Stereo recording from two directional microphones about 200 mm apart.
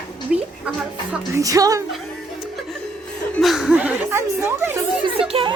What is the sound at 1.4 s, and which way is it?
Speech, 15° right (ahead or behind).